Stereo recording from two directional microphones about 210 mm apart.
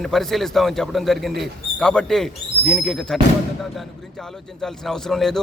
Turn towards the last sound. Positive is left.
turn(degrees=0)  # may be behind; listen again after turning